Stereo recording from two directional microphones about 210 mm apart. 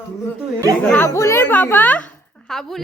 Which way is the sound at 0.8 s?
10° left (ahead or behind).